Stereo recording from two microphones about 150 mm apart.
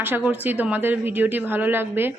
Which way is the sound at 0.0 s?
15° right (ahead or behind).